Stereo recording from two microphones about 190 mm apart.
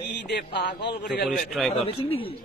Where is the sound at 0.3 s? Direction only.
60° left (ahead or behind).